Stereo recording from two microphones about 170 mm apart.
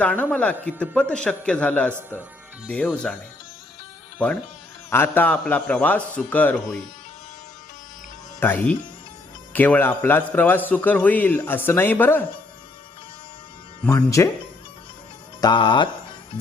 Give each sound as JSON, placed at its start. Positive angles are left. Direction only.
{"t": 0.0, "sound": "a man's voice", "side_deg": 10}
{"t": 1.9, "sound": "speech", "side_deg": -15}
{"t": 2.6, "sound": "speech", "side_deg": 5}
{"t": 4.2, "sound": "a man's voice", "side_deg": 5}
{"t": 8.4, "sound": "a man's voice", "side_deg": 10}
{"t": 13.9, "sound": "a man's voice", "side_deg": 20}
{"t": 15.4, "sound": "speech", "side_deg": 25}